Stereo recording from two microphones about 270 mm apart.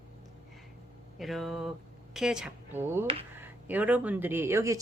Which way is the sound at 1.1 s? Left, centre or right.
Centre.